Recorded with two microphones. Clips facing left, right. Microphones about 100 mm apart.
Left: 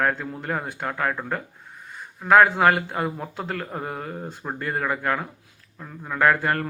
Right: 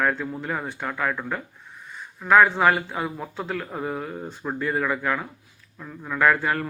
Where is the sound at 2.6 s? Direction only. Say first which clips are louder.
Left 1 dB; 50° left (ahead or behind).